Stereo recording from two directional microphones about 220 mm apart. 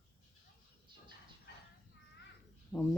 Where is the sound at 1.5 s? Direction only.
50° left (ahead or behind).